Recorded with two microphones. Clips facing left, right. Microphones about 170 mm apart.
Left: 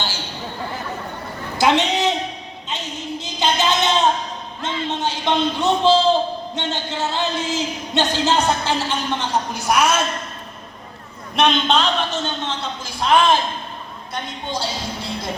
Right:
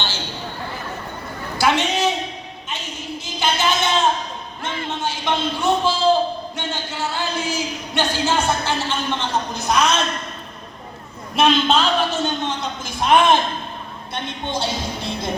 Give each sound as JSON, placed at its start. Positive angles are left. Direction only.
{"t": 1.5, "sound": "a sound", "side_deg": 20}
{"t": 4.6, "sound": "music", "side_deg": 20}
{"t": 6.6, "sound": "speech", "side_deg": 20}
{"t": 11.3, "sound": "a man's voice", "side_deg": -5}